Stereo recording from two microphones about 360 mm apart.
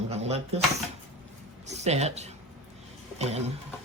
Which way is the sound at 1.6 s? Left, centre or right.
Centre.